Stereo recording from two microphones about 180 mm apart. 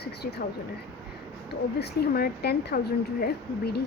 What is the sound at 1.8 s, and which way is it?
Speech, 60° left (ahead or behind).